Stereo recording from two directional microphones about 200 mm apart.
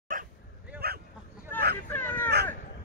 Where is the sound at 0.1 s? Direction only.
45° right (ahead or behind).